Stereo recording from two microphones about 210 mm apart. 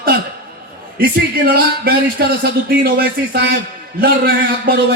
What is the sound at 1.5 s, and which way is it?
A man's voice, 45° right (ahead or behind).